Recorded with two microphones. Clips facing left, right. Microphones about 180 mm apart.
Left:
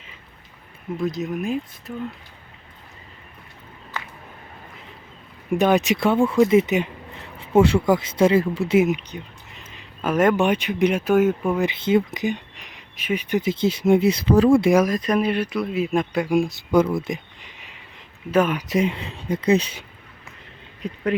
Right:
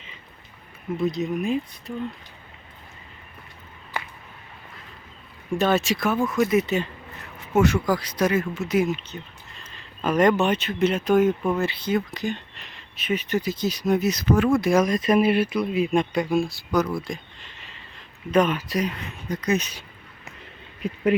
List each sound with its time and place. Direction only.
0.9 s speech: centre (ahead or behind)
3.9 s a sound: 10° right (ahead or behind)
5.5 s speech: 15° left (ahead or behind)
7.3 s speech: 30° left (ahead or behind); by 11.7 s 10° left (ahead or behind)
11.9 s speech: 20° left (ahead or behind)
13.4 s speech: 25° left (ahead or behind)
14.7 s speech: 5° left (ahead or behind); by 17.2 s 20° left (ahead or behind)
17.7 s a sound: 10° left (ahead or behind)
18.7 s speech: 25° left (ahead or behind)
20.8 s speech: 10° right (ahead or behind)